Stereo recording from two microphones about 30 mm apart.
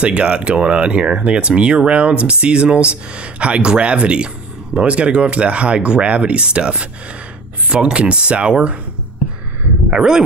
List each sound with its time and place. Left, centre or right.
0.0 s speech: right
9.8 s speech: right